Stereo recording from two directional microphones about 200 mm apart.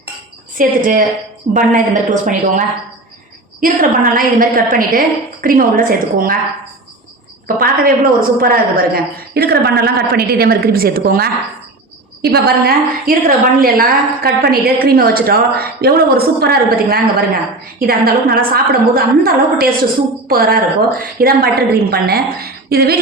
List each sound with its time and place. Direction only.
0.5 s a woman's voice: 40° right (ahead or behind)
7.4 s a woman's voice: 45° right (ahead or behind)